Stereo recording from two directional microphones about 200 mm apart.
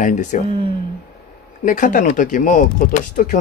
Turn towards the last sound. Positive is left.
turn(degrees=40)  # may be behind; listen again after turning